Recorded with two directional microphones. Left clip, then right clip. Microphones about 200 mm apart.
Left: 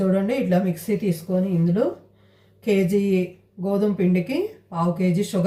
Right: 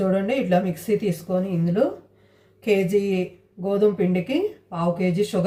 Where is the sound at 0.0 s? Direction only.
10° right (ahead or behind).